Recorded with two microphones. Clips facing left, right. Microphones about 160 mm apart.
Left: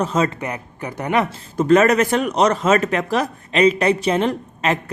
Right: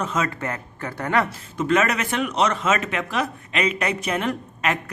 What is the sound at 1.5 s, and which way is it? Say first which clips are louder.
Speech: left 7 dB; 40° left (ahead or behind).